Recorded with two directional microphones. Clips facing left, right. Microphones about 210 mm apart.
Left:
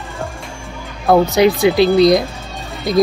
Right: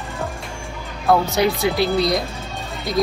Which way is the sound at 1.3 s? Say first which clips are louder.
Left 7 dB; 15° left (ahead or behind).